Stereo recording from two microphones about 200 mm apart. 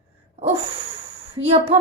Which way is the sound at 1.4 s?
30° right (ahead or behind).